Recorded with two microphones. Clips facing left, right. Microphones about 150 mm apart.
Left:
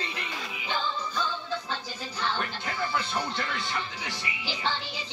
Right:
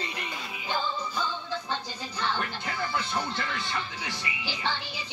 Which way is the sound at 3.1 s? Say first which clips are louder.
Even; 15° left (ahead or behind).